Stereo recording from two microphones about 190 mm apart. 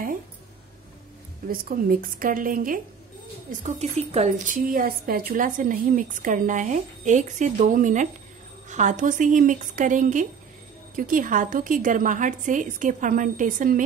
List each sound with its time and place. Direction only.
1.5 s a woman's voice: 50° right (ahead or behind)
3.6 s a woman's voice: 35° right (ahead or behind)